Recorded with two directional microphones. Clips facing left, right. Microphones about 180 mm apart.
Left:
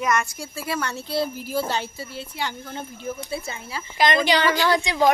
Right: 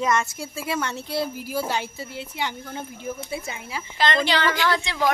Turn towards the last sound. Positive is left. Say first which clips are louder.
# left 3 dB
turn(degrees=15)  # may be behind; listen again after turning